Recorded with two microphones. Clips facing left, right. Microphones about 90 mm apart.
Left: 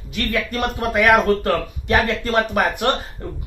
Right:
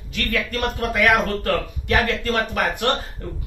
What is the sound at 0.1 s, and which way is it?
Speech, 20° left (ahead or behind).